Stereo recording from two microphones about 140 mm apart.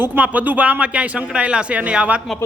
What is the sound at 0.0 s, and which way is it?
Speech, 15° right (ahead or behind).